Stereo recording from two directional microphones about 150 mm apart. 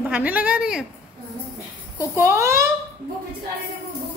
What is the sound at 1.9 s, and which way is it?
Speech, 15° right (ahead or behind).